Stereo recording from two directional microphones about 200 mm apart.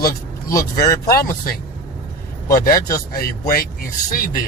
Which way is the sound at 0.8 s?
50° left (ahead or behind).